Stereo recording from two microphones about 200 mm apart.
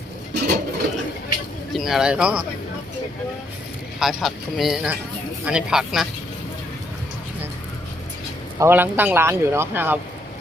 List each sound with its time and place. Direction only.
0.3 s a sound: 55° right (ahead or behind)
1.7 s speech: centre (ahead or behind)
4.0 s speech: centre (ahead or behind)
8.5 s speech: 10° right (ahead or behind)